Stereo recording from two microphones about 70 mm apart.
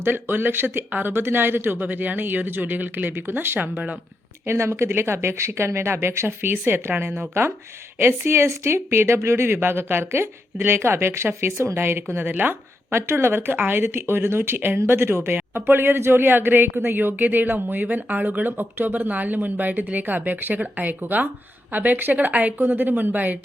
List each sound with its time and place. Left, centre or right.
0.0 s a woman's voice: right
4.4 s a woman's voice: right